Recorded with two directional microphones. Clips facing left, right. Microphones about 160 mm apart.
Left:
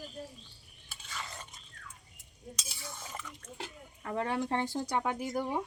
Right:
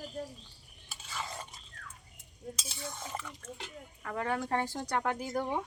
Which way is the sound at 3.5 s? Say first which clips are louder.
Left 1 dB; 30° left (ahead or behind).